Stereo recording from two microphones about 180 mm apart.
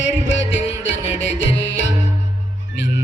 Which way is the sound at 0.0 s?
90° left.